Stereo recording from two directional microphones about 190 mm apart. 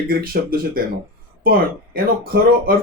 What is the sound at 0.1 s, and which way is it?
Speech, 50° right (ahead or behind).